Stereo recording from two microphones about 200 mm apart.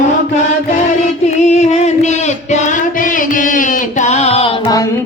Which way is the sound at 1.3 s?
35° left (ahead or behind).